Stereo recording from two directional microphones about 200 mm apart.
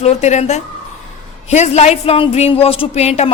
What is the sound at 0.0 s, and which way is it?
A woman's voice, 35° left (ahead or behind).